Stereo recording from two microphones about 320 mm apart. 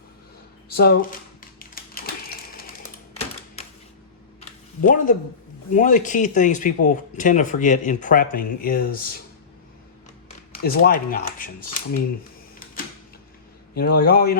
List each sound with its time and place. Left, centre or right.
0.7 s speech: left
1.4 s typewriter: left
4.4 s a sound: left
5.7 s speech: left
10.6 s speech: left
13.7 s speech: left